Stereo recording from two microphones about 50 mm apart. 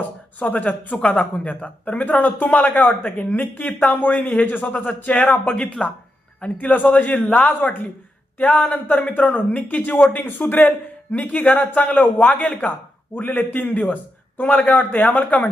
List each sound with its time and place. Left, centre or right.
0.3 s a man's voice: left